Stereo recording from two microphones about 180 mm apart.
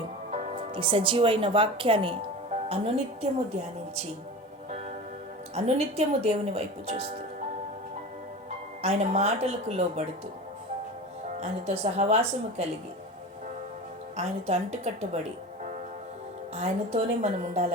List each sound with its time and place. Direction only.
0.3 s music: 40° right (ahead or behind)
0.7 s speech: 30° right (ahead or behind)
5.5 s speech: 35° right (ahead or behind)
8.8 s speech: 35° right (ahead or behind)
11.3 s speech: 35° right (ahead or behind)
14.2 s speech: 35° right (ahead or behind)
16.6 s speech: 35° right (ahead or behind)